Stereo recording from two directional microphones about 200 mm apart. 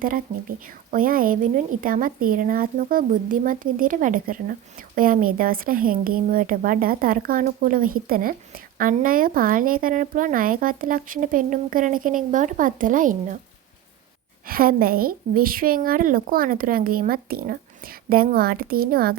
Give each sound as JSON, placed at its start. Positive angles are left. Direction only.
{"t": 0.9, "sound": "speech", "side_deg": -45}
{"t": 14.4, "sound": "speech", "side_deg": -45}